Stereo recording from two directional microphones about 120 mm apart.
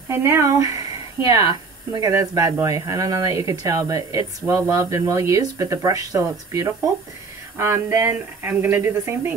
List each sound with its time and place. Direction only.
0.1 s speech: 20° right (ahead or behind)